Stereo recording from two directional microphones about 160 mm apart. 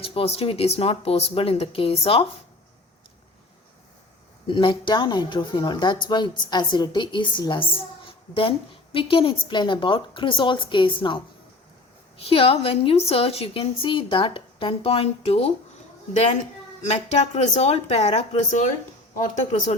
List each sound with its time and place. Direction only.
0.0 s a woman's voice: 35° left (ahead or behind)
4.4 s a woman's voice: 30° left (ahead or behind)
12.2 s a woman's voice: 35° left (ahead or behind)
16.9 s speech: 45° left (ahead or behind)